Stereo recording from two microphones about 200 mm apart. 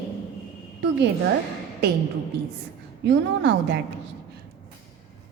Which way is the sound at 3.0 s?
60° right (ahead or behind).